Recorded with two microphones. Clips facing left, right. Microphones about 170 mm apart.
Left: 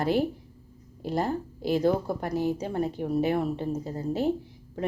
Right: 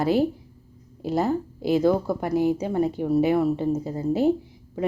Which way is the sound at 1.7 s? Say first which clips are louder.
Right 4 dB; 10° right (ahead or behind).